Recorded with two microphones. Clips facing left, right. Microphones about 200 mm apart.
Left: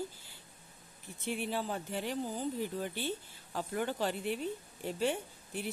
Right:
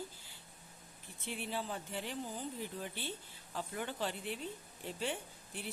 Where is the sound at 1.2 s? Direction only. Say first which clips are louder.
Left 5 dB; 45° left (ahead or behind).